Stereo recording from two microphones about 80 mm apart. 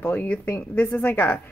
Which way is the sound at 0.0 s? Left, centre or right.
Left.